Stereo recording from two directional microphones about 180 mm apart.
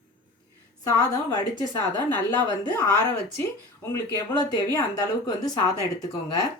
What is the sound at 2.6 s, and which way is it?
Speech, 20° left (ahead or behind).